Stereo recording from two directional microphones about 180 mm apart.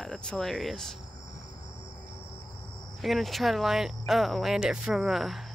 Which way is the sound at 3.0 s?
Centre (ahead or behind).